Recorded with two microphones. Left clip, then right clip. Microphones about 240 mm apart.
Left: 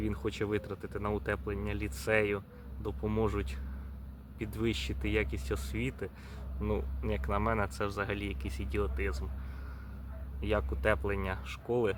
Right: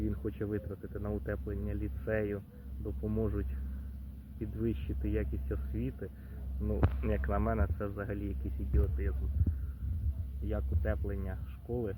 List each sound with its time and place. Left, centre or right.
0.0 s speech: centre
10.5 s speech: centre